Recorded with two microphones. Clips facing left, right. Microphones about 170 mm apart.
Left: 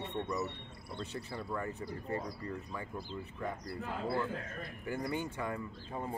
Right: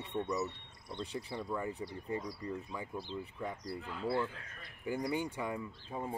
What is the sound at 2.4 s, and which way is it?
Speech, 10° right (ahead or behind).